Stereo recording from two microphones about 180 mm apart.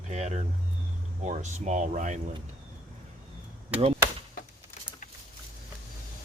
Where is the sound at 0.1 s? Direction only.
40° right (ahead or behind).